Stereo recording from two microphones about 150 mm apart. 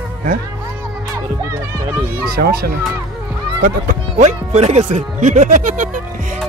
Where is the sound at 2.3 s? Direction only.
90° right.